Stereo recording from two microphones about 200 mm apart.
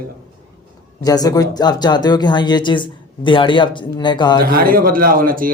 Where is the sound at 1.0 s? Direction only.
20° left (ahead or behind).